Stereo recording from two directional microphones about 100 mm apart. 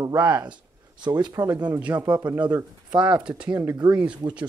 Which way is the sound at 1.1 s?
45° right (ahead or behind).